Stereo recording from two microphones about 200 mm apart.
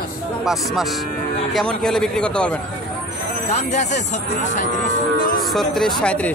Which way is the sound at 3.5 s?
35° left (ahead or behind).